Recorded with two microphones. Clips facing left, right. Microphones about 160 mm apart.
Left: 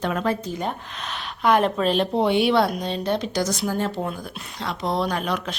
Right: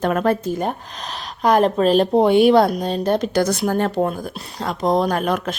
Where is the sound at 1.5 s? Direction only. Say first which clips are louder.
Right 4 dB; 40° right (ahead or behind).